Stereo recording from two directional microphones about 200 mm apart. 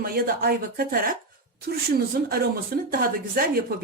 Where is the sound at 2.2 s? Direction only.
50° right (ahead or behind).